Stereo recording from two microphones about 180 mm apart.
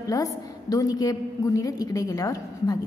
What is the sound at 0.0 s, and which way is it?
A woman's voice, 20° left (ahead or behind).